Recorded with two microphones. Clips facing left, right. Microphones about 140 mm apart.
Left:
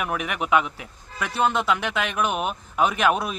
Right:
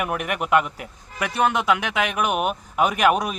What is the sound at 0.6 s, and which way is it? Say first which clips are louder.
Speech: right 2 dB; 55° right (ahead or behind).